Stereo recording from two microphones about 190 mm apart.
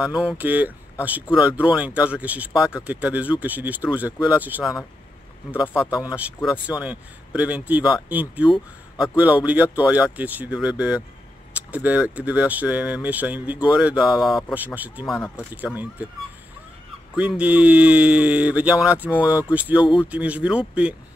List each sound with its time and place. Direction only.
0.0 s speech: 5° right (ahead or behind)
5.8 s speech: 5° right (ahead or behind)
17.1 s speech: 5° right (ahead or behind)